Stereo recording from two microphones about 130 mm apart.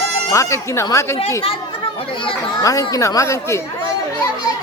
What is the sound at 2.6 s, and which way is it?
Speech, 25° left (ahead or behind).